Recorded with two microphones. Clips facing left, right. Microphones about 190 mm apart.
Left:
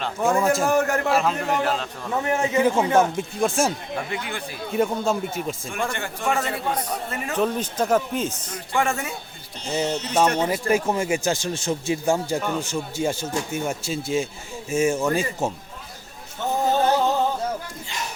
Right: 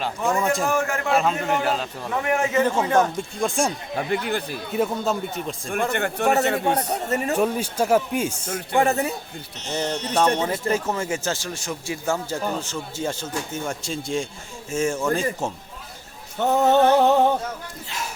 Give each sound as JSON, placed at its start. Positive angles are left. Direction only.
{"t": 0.0, "sound": "speech", "side_deg": 0}
{"t": 0.7, "sound": "a man's voice", "side_deg": 40}
{"t": 1.1, "sound": "speech", "side_deg": 0}
{"t": 2.2, "sound": "speech", "side_deg": 20}
{"t": 3.9, "sound": "speech", "side_deg": -40}
{"t": 4.7, "sound": "speech", "side_deg": 0}
{"t": 5.9, "sound": "a man's voice", "side_deg": -60}
{"t": 6.4, "sound": "a man's voice", "side_deg": -70}
{"t": 6.9, "sound": "speech", "side_deg": -40}
{"t": 7.3, "sound": "a man's voice", "side_deg": -10}
{"t": 8.7, "sound": "speech", "side_deg": -35}
{"t": 9.6, "sound": "speech", "side_deg": 5}
{"t": 16.4, "sound": "a sound", "side_deg": -65}
{"t": 17.8, "sound": "speech", "side_deg": -5}